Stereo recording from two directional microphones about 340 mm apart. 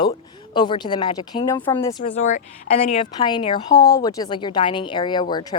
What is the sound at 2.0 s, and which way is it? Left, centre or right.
Speech, left.